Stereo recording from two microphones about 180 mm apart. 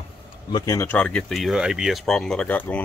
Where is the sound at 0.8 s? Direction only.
5° left (ahead or behind).